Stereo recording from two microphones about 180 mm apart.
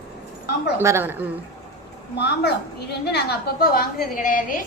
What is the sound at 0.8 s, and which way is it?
Speech, 15° right (ahead or behind).